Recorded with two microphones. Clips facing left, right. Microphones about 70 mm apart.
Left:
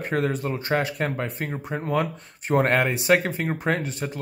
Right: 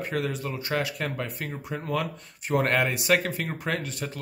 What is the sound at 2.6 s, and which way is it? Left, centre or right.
Speech, left.